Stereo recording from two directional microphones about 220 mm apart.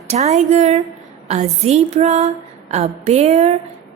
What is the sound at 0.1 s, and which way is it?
A woman's voice, 30° right (ahead or behind).